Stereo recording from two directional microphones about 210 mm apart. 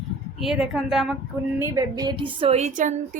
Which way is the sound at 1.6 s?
15° right (ahead or behind).